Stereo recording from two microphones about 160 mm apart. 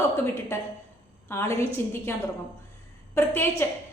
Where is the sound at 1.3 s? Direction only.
15° left (ahead or behind).